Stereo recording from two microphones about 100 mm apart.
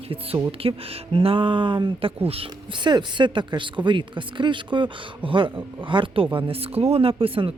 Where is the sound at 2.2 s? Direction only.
70° right (ahead or behind).